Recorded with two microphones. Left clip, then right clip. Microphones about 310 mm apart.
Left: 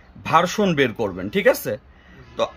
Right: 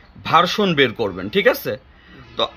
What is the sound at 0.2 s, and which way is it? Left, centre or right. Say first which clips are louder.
Speech: right 2 dB; centre.